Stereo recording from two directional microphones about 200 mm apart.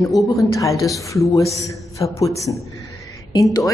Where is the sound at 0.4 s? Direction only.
15° left (ahead or behind).